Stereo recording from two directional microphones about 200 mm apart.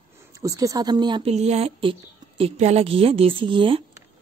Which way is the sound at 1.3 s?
30° right (ahead or behind).